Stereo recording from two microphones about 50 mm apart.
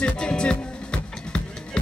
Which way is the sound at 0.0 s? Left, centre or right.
Centre.